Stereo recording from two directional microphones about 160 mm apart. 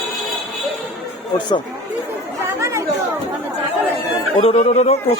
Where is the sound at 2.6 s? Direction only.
20° right (ahead or behind).